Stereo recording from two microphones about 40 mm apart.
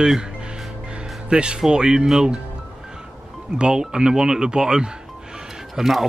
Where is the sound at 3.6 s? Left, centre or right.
Right.